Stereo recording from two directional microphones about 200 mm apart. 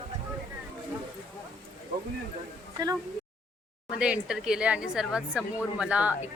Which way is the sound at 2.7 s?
15° right (ahead or behind).